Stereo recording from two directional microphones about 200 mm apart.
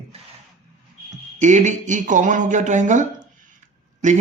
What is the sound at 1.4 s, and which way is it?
Speech, 35° right (ahead or behind).